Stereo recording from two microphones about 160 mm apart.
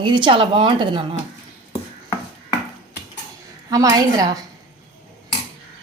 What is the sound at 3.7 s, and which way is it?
Speech, 20° right (ahead or behind).